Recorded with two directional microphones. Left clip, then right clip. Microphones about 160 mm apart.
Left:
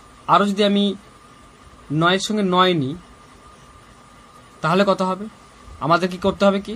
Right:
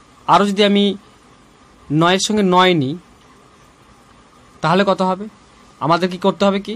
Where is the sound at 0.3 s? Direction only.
30° right (ahead or behind).